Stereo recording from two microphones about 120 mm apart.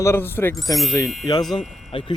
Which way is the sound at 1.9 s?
45° left (ahead or behind).